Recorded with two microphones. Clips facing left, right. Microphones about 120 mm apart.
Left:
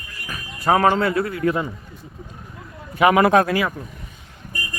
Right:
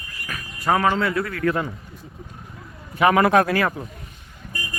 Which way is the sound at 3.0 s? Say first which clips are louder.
Left 2 dB; 20° left (ahead or behind).